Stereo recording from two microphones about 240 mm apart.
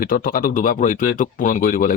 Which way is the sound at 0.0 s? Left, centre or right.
Left.